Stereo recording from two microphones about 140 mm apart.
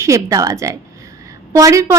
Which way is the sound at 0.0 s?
25° right (ahead or behind).